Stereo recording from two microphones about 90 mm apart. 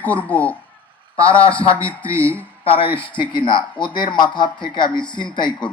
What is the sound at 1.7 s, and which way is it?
Speech, 15° left (ahead or behind).